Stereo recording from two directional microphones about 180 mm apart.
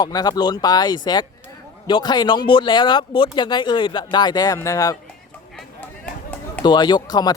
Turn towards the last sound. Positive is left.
turn(degrees=20)  # may be behind; listen again after turning